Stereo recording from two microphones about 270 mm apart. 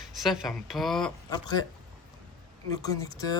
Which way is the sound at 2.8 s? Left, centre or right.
Centre.